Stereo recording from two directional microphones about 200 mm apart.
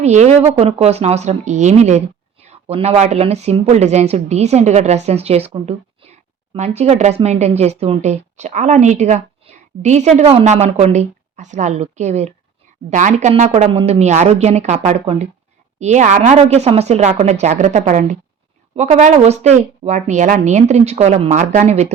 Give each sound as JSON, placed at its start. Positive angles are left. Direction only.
{"t": 0.0, "sound": "a woman's voice", "side_deg": -35}